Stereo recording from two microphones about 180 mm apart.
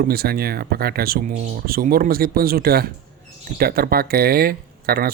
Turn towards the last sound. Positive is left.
turn(degrees=-55)  # may be behind; listen again after turning